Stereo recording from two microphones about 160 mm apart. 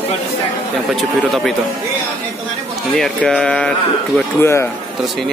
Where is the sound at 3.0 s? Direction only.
5° left (ahead or behind).